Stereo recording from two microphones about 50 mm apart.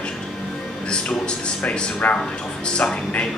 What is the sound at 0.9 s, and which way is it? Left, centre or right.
A man's voice, centre.